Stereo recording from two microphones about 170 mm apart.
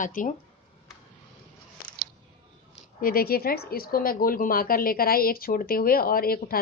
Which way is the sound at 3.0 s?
60° left (ahead or behind).